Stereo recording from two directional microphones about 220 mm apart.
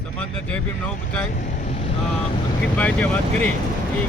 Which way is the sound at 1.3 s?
35° left (ahead or behind).